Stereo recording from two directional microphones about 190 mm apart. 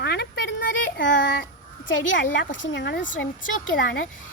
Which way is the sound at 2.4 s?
70° left (ahead or behind).